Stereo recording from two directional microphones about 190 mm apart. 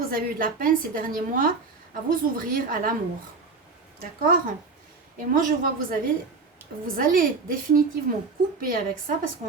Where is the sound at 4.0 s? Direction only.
50° right (ahead or behind).